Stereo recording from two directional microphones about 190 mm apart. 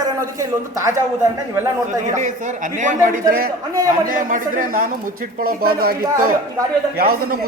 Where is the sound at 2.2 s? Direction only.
40° right (ahead or behind).